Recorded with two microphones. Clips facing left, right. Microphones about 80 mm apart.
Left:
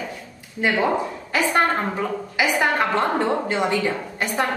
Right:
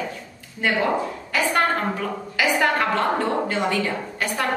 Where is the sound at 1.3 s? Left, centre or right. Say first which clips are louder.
Left 1 dB; centre.